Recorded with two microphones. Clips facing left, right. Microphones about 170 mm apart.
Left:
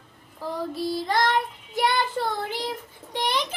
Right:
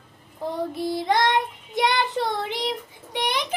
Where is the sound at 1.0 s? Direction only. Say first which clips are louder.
Right 3 dB; 15° right (ahead or behind).